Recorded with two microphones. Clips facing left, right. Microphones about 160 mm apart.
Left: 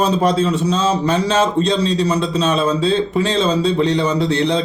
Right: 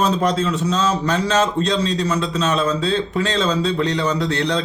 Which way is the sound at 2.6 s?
25° left (ahead or behind).